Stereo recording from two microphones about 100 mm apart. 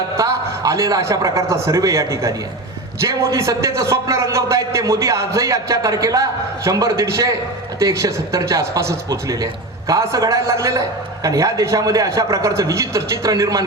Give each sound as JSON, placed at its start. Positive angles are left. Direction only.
{"t": 0.2, "sound": "a man's voice", "side_deg": -30}